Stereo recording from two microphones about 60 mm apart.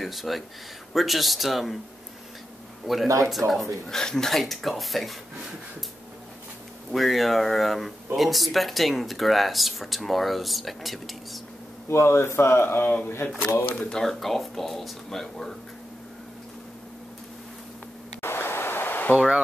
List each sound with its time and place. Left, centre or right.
0.0 s speech: centre
2.9 s speech: centre
3.8 s speech: centre
6.9 s speech: centre
11.9 s speech: left
13.7 s speech: centre
18.2 s a sound: left